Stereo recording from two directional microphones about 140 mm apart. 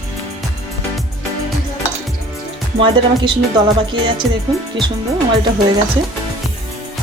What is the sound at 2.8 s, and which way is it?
Music, 35° right (ahead or behind).